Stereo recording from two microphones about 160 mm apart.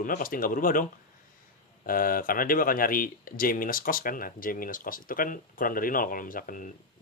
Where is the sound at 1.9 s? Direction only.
65° left (ahead or behind).